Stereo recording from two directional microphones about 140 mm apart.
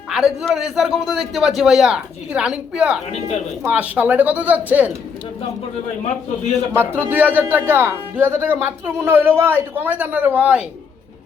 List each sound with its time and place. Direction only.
0.1 s a man's voice: 5° right (ahead or behind)
3.1 s speech: 50° left (ahead or behind)
3.6 s speech: 10° right (ahead or behind)
6.7 s speech: 15° right (ahead or behind)